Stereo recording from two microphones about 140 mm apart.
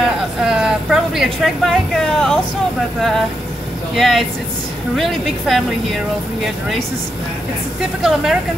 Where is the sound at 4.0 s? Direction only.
Centre (ahead or behind).